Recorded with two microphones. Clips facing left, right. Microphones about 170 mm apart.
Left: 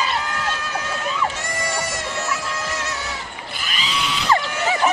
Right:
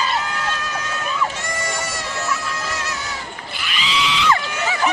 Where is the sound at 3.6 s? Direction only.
40° left (ahead or behind).